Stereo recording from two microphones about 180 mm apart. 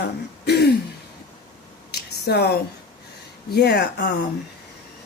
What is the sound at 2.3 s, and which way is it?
Speech, 65° left (ahead or behind).